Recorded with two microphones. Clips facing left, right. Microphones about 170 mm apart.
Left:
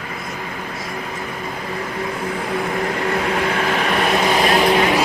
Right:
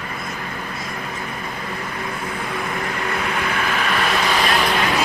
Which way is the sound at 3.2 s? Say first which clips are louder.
Left 4 dB; 25° left (ahead or behind).